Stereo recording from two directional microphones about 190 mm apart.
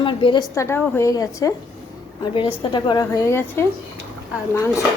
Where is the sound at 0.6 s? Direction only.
10° left (ahead or behind).